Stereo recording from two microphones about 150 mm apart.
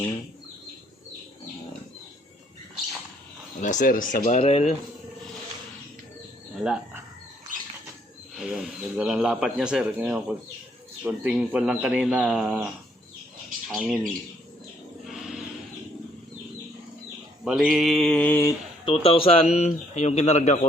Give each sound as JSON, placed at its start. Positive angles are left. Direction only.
{"t": 3.6, "sound": "speech", "side_deg": 60}
{"t": 8.4, "sound": "speech", "side_deg": 0}
{"t": 15.1, "sound": "a sound", "side_deg": 0}
{"t": 17.4, "sound": "speech", "side_deg": -5}
{"t": 18.9, "sound": "speech", "side_deg": 35}